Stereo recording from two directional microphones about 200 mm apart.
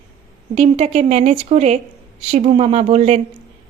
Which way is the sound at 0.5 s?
35° right (ahead or behind).